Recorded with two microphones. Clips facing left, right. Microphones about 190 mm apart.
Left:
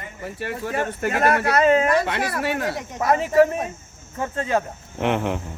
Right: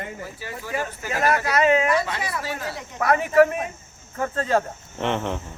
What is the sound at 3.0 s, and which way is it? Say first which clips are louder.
Speech: even; 25° left (ahead or behind).